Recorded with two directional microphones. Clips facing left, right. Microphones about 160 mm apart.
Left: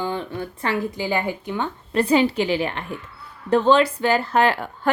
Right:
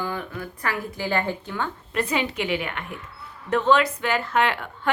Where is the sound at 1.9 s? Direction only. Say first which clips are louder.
Left 9 dB; 30° left (ahead or behind).